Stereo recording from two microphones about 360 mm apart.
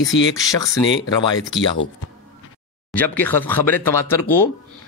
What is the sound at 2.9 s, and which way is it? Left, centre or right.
Speech, centre.